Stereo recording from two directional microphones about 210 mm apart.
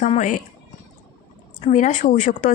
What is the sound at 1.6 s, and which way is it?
Speech, 35° left (ahead or behind).